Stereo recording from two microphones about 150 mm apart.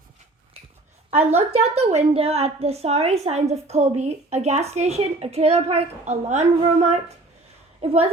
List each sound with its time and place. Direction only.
1.1 s a woman's voice: 45° right (ahead or behind)